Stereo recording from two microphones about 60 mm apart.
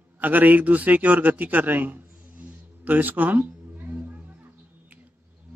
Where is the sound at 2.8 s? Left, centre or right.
Right.